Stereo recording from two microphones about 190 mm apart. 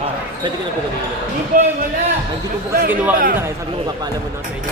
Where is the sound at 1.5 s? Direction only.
45° right (ahead or behind).